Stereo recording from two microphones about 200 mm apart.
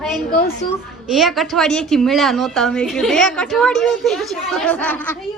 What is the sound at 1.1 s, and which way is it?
A woman's voice, centre (ahead or behind).